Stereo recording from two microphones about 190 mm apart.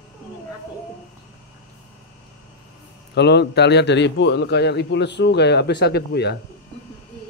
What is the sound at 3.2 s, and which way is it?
A man's voice, 60° left (ahead or behind).